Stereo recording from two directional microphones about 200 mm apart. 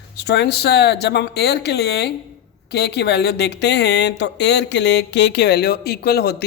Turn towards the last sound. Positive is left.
turn(degrees=50)  # may be behind; listen again after turning